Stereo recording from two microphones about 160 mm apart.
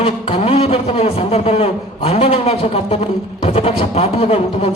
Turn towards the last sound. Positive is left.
turn(degrees=40)  # may be behind; listen again after turning